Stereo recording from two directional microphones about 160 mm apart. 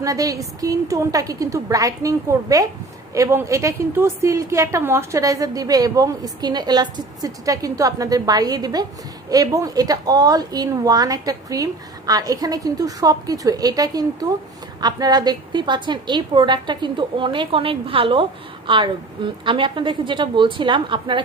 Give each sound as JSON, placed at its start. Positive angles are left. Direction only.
{"t": 0.0, "sound": "a woman's voice", "side_deg": -20}